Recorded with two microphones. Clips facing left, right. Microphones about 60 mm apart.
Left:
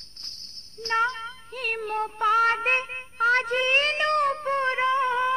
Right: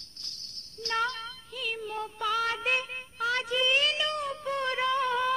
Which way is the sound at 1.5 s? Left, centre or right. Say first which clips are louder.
Left 6 dB; left.